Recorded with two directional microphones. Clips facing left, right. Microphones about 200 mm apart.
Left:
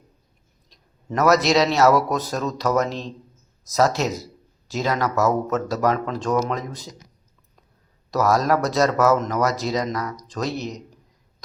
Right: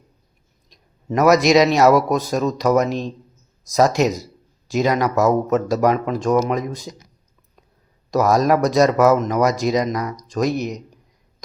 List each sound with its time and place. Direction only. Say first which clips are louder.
0.7 s speech: right 5 dB; 15° right (ahead or behind)
8.1 s speech: right 3 dB; 15° right (ahead or behind)